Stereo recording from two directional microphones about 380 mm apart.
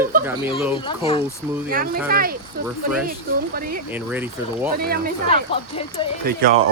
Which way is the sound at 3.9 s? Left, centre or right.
Centre.